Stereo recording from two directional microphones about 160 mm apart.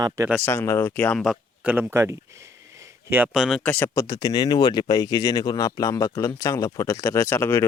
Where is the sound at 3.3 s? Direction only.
Centre (ahead or behind).